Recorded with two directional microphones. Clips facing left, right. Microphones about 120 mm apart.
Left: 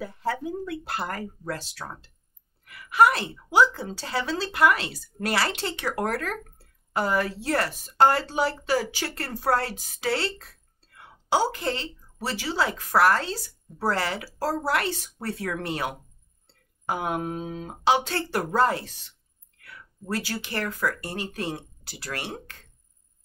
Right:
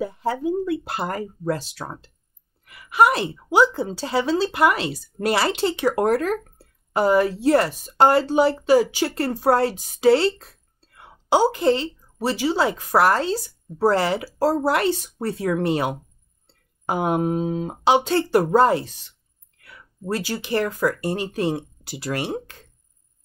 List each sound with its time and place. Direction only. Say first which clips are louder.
0.0 s a woman's voice: right 5 dB; 20° right (ahead or behind)